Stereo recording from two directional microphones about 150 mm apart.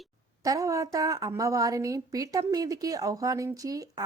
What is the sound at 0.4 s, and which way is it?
A woman's voice, 20° right (ahead or behind).